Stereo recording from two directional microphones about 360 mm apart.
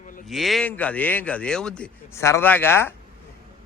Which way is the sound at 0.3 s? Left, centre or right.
Centre.